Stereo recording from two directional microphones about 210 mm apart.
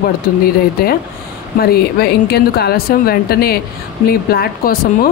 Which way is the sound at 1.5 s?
45° left (ahead or behind).